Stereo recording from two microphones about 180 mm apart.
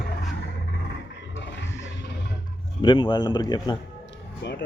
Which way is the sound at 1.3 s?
80° left.